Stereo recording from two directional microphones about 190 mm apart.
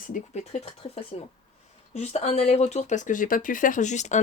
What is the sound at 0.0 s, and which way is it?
Speech, 40° left (ahead or behind).